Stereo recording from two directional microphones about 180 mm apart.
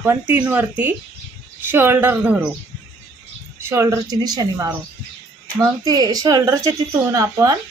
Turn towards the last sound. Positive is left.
turn(degrees=-20)  # may be behind; listen again after turning